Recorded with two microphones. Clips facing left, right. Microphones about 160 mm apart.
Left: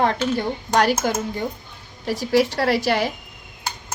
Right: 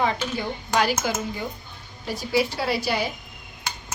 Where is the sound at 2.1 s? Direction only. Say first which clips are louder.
Left 5 dB; 80° left.